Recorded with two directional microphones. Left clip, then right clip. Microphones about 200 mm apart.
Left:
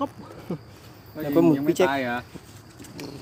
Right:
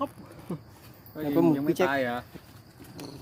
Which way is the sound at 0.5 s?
5° left (ahead or behind).